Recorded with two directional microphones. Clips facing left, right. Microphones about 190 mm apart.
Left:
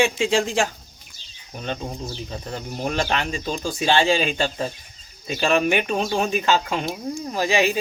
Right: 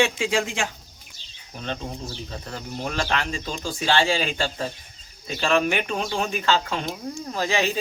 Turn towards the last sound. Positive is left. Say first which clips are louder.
# left 4 dB
turn(degrees=10)  # may be behind; listen again after turning